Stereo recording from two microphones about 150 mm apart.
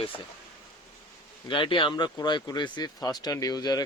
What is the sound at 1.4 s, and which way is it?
Speech, 35° left (ahead or behind).